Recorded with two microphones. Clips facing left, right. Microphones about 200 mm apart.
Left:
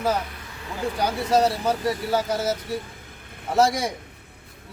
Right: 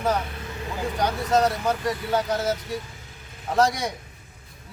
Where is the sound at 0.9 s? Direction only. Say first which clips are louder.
Left 1 dB; 10° left (ahead or behind).